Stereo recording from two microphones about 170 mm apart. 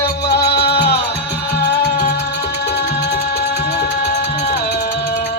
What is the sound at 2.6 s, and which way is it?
Music, 75° left (ahead or behind).